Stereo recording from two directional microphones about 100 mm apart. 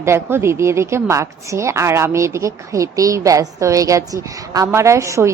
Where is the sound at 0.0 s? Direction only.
25° right (ahead or behind).